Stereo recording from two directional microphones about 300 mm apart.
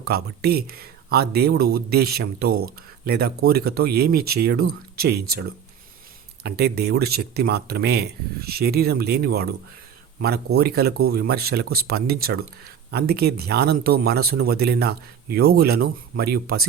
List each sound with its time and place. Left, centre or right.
0.0 s speech: right
6.4 s speech: right